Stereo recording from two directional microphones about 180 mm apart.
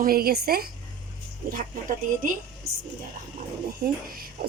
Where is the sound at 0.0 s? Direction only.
55° right (ahead or behind).